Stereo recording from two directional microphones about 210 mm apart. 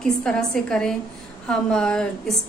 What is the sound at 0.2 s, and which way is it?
A woman's voice, 5° left (ahead or behind).